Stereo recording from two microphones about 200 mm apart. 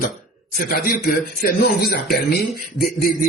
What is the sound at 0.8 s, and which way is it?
Speech, 50° left (ahead or behind).